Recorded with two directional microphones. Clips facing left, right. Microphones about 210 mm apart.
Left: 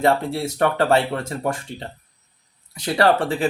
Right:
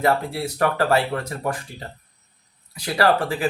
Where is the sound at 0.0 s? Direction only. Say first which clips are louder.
Left 2 dB; 25° left (ahead or behind).